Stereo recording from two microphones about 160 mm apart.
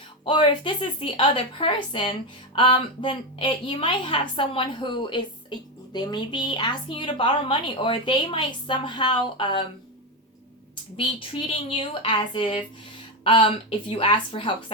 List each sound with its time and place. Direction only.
0.3 s a woman's voice: 30° left (ahead or behind)
10.9 s a woman's voice: 35° left (ahead or behind)